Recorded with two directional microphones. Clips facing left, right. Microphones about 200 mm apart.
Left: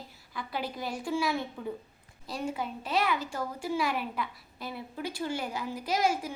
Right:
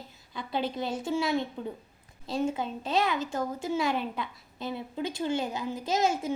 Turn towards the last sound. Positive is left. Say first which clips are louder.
# right 1 dB
turn(degrees=-25)  # may be behind; listen again after turning